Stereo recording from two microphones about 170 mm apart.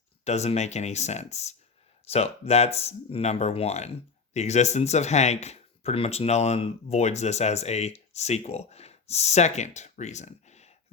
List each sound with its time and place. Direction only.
0.3 s speech: 40° left (ahead or behind)